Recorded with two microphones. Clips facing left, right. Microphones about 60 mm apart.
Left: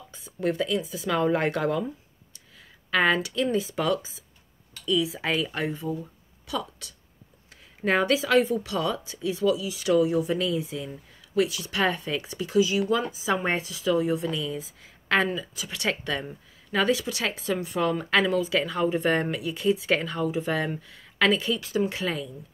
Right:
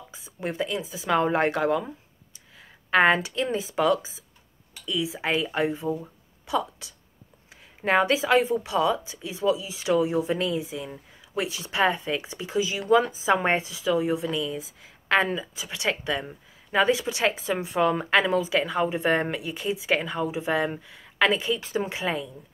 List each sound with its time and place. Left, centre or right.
0.1 s speech: centre